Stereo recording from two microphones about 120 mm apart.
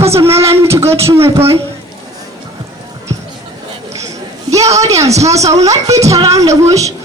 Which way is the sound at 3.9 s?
25° right (ahead or behind).